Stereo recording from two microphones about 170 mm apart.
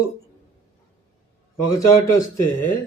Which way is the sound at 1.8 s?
15° left (ahead or behind).